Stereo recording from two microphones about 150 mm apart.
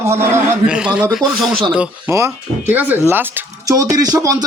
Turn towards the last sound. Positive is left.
turn(degrees=-25)  # may be behind; listen again after turning